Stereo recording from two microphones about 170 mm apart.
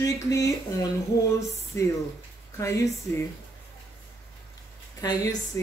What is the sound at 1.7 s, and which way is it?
Speech, 15° left (ahead or behind).